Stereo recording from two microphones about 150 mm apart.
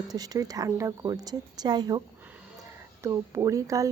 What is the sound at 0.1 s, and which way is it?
A woman's voice, 25° right (ahead or behind).